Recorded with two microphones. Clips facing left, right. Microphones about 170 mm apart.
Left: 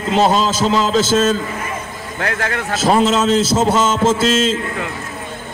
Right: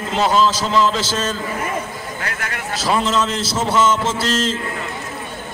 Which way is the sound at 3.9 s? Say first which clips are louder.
Left 4 dB; 50° left (ahead or behind).